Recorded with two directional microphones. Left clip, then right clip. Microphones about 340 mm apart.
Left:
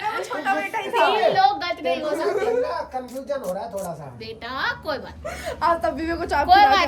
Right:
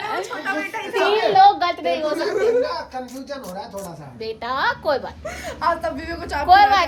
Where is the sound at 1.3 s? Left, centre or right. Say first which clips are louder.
Right 6 dB; centre.